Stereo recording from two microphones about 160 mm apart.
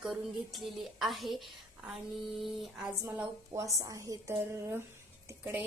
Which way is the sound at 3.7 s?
20° right (ahead or behind).